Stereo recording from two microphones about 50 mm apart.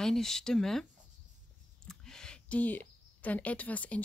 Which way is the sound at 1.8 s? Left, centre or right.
Centre.